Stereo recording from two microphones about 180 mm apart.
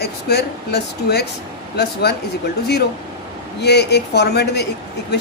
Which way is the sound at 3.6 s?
70° left (ahead or behind).